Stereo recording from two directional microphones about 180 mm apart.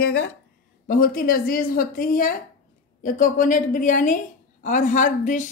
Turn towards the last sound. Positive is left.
turn(degrees=45)  # may be behind; listen again after turning